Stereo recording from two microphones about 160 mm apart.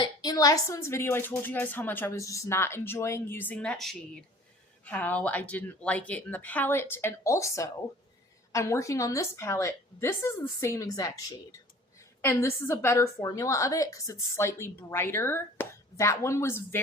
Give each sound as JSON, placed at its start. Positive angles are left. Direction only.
{"t": 0.0, "sound": "a woman's voice", "side_deg": 25}